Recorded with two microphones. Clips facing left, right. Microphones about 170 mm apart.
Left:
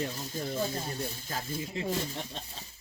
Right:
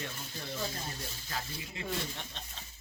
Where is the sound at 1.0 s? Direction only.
50° left (ahead or behind).